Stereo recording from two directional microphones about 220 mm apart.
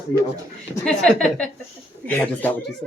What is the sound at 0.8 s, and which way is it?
A woman's voice, 5° left (ahead or behind).